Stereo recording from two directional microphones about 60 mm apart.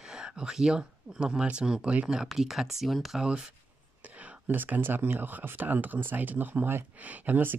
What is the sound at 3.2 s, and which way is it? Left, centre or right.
Speech, centre.